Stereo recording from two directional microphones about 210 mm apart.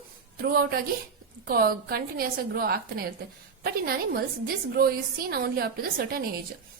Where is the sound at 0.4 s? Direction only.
45° right (ahead or behind).